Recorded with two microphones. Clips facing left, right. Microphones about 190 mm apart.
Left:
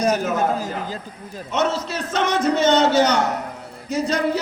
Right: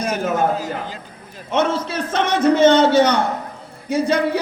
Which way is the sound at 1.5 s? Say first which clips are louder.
Right 3 dB; 55° right (ahead or behind).